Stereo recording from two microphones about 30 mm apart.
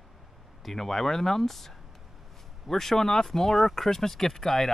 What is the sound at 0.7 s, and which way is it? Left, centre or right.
Speech, centre.